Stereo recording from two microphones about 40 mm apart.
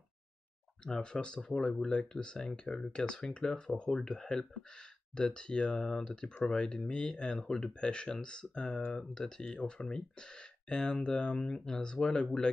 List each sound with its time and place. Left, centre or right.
0.9 s speech: left